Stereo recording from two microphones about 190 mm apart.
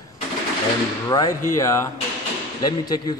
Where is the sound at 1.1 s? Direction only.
20° left (ahead or behind).